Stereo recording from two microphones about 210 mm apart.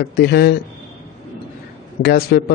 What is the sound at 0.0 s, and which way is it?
Speech, 50° left (ahead or behind).